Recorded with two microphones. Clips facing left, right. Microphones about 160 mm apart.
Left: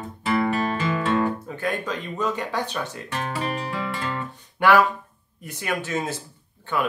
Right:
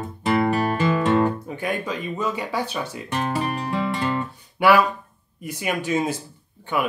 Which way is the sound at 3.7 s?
20° right (ahead or behind).